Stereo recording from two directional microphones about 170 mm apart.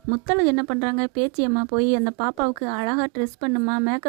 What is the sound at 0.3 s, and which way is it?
Speech, 35° right (ahead or behind).